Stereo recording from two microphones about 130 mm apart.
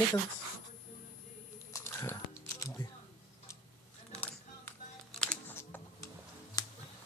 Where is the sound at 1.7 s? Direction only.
20° left (ahead or behind).